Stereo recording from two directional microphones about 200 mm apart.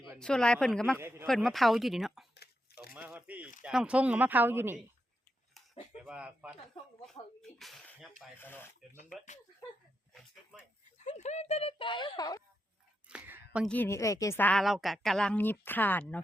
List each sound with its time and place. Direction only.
0.0 s speech: 5° left (ahead or behind)
0.9 s speech: 10° right (ahead or behind)
1.3 s speech: centre (ahead or behind)
2.9 s biting: 5° right (ahead or behind)
3.6 s speech: 5° right (ahead or behind)
6.0 s speech: 5° right (ahead or behind)
7.6 s a woman's voice: centre (ahead or behind)
9.0 s speech: 35° left (ahead or behind)
10.9 s speech: 35° left (ahead or behind); by 12.4 s 20° left (ahead or behind)
13.1 s a sound: 5° right (ahead or behind)
13.7 s a woman's voice: 10° left (ahead or behind)